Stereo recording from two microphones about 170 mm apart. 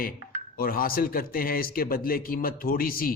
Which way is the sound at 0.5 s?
60° left (ahead or behind).